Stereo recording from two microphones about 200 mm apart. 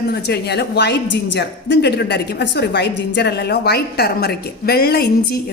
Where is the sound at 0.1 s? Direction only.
55° left (ahead or behind).